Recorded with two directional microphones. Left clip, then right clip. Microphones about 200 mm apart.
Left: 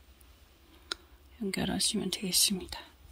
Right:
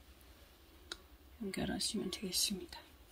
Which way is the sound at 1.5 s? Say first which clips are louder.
Left 7 dB; 35° left (ahead or behind).